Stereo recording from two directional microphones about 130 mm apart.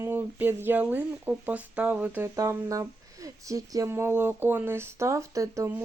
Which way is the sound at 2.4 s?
25° right (ahead or behind).